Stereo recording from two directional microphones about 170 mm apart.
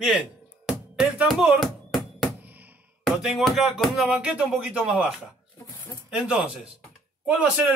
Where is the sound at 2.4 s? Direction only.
10° right (ahead or behind).